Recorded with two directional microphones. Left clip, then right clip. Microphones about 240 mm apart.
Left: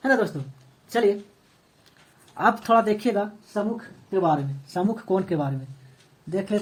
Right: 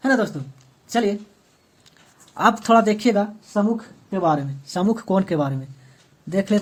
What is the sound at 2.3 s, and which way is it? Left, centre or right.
Speech, right.